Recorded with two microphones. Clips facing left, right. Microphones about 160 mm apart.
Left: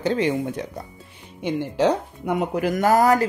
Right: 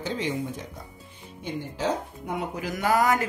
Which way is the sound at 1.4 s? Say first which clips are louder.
Left 8 dB; 75° left (ahead or behind).